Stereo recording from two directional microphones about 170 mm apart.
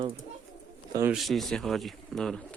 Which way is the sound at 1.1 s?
Centre (ahead or behind).